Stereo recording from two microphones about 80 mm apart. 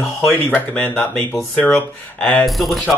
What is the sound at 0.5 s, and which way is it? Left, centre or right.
Speech, left.